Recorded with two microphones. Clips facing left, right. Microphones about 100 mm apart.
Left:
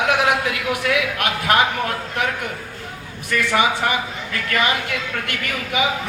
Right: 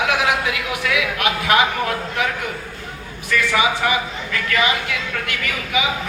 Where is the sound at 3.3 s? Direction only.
50° left (ahead or behind).